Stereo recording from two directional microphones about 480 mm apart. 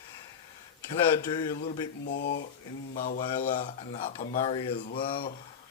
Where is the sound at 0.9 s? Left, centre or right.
Centre.